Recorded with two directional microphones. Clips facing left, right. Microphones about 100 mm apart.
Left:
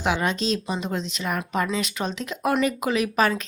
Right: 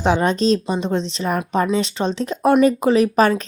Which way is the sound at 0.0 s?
35° right (ahead or behind).